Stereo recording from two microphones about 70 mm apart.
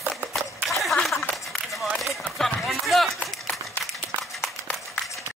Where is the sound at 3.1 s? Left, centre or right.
Centre.